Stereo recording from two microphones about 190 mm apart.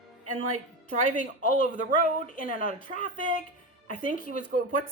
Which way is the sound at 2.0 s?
45° left (ahead or behind).